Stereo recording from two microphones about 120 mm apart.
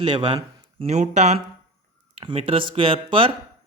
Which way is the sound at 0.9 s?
70° right (ahead or behind).